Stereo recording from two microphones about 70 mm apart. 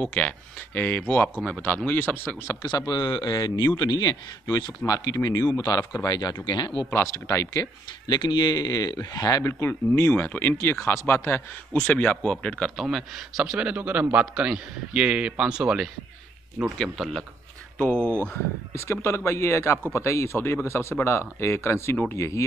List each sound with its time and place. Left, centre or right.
0.7 s speech: left
2.6 s a man's voice: left
6.9 s speech: left
8.1 s speech: left
9.4 s speech: left
11.7 s speech: centre
12.8 s speech: centre
16.7 s a man's voice: centre
17.7 s speech: centre
18.0 s speech: right
18.7 s speech: left